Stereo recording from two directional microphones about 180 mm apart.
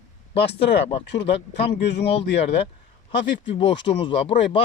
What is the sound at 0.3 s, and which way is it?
Speech, 70° left (ahead or behind).